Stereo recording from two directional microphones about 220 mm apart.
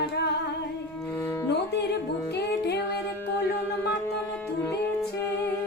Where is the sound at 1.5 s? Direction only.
50° left (ahead or behind).